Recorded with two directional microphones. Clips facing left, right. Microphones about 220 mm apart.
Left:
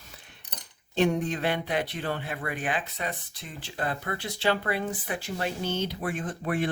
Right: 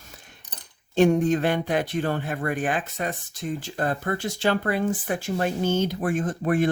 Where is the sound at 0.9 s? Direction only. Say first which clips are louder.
Right 6 dB; 45° right (ahead or behind).